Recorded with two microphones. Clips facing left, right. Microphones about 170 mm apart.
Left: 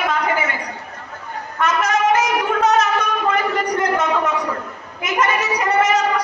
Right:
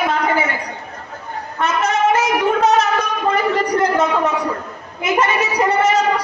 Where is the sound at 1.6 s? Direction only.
30° right (ahead or behind).